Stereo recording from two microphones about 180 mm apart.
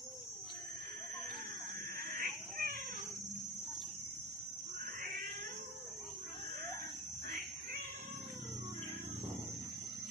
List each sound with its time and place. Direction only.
2.0 s cat: 55° right (ahead or behind)